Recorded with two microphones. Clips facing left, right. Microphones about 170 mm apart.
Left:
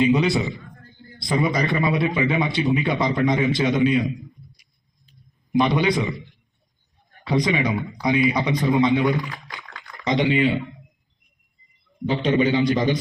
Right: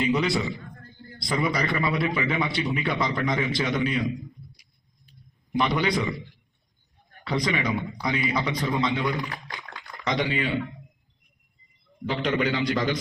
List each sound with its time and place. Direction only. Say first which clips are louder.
0.0 s a man's voice: left 5 dB; 20° left (ahead or behind)
5.5 s a man's voice: left 5 dB; 20° left (ahead or behind)
7.3 s a man's voice: left 5 dB; 20° left (ahead or behind)
9.9 s a sound: left 5 dB; 20° left (ahead or behind)
12.0 s a man's voice: left 5 dB; 20° left (ahead or behind)